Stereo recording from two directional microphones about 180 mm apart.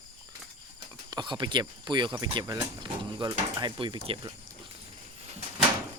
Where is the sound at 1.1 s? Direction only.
25° right (ahead or behind).